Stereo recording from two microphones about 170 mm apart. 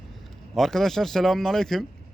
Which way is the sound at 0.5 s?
Centre (ahead or behind).